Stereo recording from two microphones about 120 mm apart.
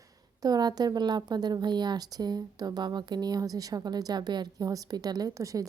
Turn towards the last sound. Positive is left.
turn(degrees=-25)  # may be behind; listen again after turning